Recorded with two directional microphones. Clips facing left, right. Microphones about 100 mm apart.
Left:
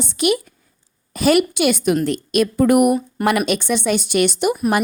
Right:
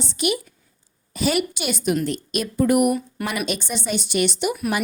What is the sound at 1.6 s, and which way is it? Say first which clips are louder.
A woman's voice: left 6 dB; 70° left (ahead or behind).